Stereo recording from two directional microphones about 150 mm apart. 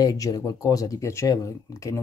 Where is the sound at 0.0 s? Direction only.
25° left (ahead or behind).